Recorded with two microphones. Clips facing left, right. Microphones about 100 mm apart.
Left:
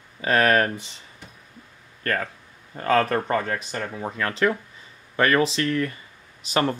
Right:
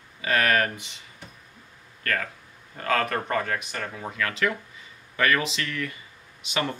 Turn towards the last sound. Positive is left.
turn(degrees=40)  # may be behind; listen again after turning